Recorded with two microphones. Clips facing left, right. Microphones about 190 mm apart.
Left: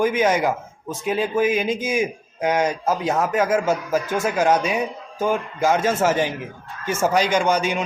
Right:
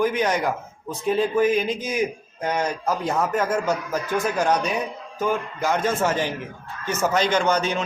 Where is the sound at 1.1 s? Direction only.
5° left (ahead or behind).